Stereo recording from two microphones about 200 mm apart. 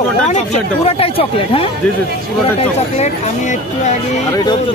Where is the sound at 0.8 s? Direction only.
30° left (ahead or behind).